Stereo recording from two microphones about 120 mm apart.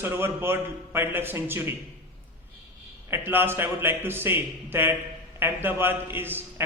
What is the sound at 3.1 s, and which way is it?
A man's voice, 20° right (ahead or behind).